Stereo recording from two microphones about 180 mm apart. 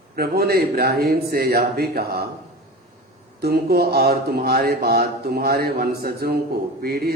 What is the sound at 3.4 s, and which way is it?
Speech, 60° right (ahead or behind).